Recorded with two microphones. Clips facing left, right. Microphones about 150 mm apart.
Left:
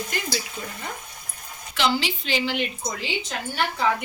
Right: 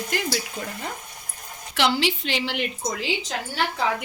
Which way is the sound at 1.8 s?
70° right (ahead or behind).